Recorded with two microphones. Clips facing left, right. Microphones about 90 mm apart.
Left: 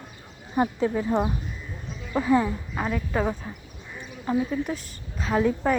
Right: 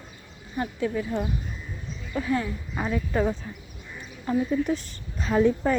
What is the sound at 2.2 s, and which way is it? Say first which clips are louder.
Speech: left 5 dB; 25° left (ahead or behind).